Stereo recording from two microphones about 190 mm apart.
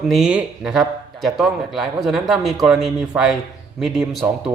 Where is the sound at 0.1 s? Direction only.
5° right (ahead or behind).